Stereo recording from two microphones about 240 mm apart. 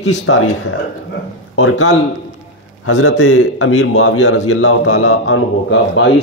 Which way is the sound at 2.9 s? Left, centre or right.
Left.